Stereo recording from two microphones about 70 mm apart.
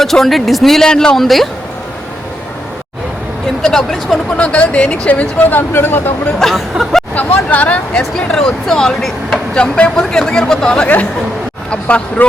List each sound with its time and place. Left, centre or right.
0.0 s speech: centre
3.6 s speech: centre
4.4 s speech: centre
6.4 s speech: centre
7.1 s speech: left
8.1 s speech: centre
9.7 s speech: centre